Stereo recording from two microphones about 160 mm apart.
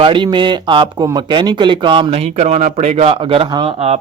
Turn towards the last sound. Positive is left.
turn(degrees=-40)  # may be behind; listen again after turning